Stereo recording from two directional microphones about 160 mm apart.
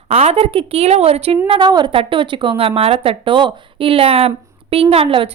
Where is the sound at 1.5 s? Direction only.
25° right (ahead or behind).